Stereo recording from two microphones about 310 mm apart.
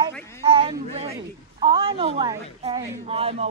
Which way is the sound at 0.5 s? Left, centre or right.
Centre.